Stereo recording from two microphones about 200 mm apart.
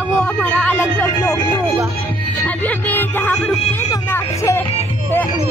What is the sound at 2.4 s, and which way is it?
Speech, 10° left (ahead or behind).